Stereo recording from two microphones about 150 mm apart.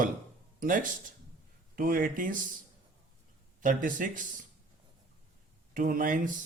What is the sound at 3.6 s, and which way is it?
Speech, 65° right (ahead or behind).